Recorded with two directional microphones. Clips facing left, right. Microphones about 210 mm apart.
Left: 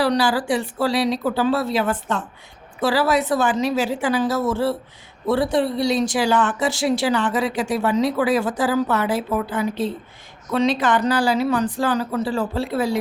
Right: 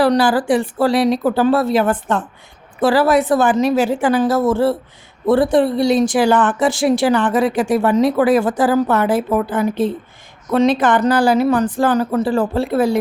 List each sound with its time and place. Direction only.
0.0 s speech: 50° right (ahead or behind)